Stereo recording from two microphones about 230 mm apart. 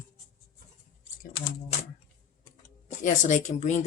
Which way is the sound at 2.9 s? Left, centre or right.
Left.